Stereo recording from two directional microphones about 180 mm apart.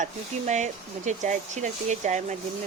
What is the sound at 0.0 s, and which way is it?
Speech, 40° right (ahead or behind).